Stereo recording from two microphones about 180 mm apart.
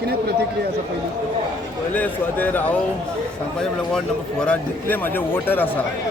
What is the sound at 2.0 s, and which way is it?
Speech, 10° left (ahead or behind).